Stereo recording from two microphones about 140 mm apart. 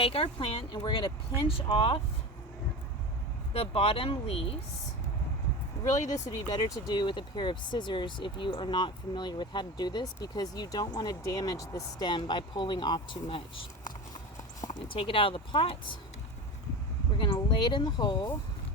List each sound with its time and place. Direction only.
0.0 s speech: 45° left (ahead or behind)
3.5 s speech: 45° left (ahead or behind)
5.8 s speech: 20° left (ahead or behind)
14.6 s speech: 35° left (ahead or behind)
17.2 s speech: 35° left (ahead or behind)